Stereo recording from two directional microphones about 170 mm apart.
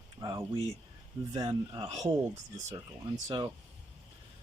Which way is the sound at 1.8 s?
40° right (ahead or behind).